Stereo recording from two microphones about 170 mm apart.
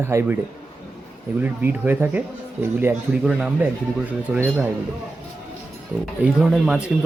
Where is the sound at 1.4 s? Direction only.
10° right (ahead or behind).